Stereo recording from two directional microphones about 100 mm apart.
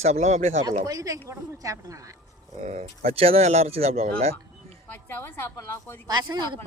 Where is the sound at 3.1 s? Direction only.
75° right (ahead or behind).